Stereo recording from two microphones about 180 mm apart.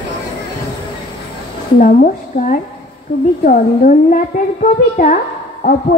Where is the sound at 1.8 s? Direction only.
45° left (ahead or behind).